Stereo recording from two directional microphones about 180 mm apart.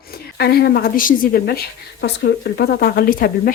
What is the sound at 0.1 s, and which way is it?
Speech, 60° left (ahead or behind).